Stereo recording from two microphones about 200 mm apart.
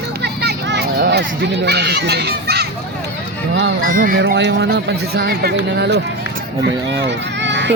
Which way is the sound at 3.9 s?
45° right (ahead or behind).